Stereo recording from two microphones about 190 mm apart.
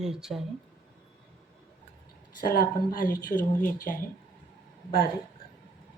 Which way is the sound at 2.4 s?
50° left (ahead or behind).